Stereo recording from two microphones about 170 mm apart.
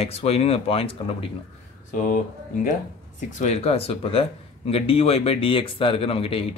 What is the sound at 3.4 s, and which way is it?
Speech, 35° left (ahead or behind).